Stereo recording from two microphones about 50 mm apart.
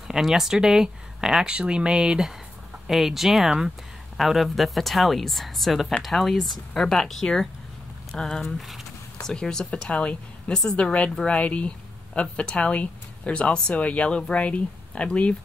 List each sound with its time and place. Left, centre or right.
0.1 s speech: centre
8.5 s speech: centre
9.2 s speech: centre
10.5 s speech: centre
10.8 s speech: left